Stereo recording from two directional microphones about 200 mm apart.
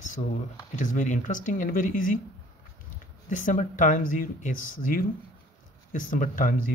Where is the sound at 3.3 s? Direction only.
40° left (ahead or behind).